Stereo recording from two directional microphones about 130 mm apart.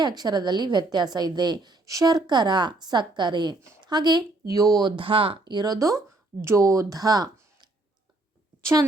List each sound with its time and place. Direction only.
0.2 s a woman's voice: 35° right (ahead or behind)